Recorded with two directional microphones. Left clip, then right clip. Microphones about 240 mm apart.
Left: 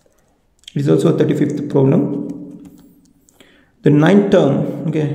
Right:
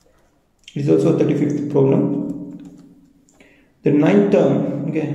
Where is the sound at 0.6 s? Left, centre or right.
Left.